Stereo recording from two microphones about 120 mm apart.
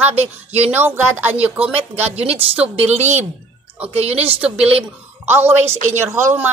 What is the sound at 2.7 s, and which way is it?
Speech, 65° right (ahead or behind).